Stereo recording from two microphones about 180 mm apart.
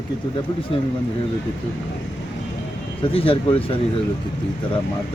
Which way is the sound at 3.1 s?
30° left (ahead or behind).